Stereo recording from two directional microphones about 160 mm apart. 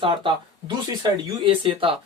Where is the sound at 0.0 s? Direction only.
30° right (ahead or behind).